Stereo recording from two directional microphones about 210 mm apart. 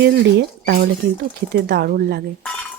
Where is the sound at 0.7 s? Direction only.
45° right (ahead or behind).